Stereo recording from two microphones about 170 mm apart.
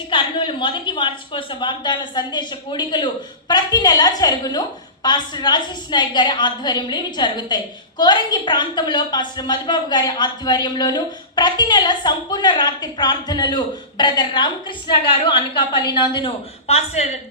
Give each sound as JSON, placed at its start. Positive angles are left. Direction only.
{"t": 0.1, "sound": "a woman's voice", "side_deg": 30}